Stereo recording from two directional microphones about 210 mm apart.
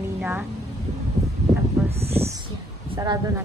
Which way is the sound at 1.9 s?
30° right (ahead or behind).